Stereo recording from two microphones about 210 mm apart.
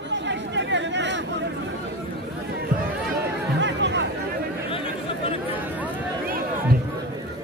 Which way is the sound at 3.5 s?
55° right (ahead or behind).